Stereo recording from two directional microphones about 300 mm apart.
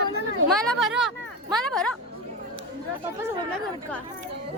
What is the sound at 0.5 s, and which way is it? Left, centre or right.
A woman's voice, centre.